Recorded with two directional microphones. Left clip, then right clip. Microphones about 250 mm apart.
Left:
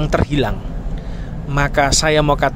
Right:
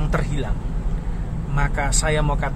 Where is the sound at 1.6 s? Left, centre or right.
Left.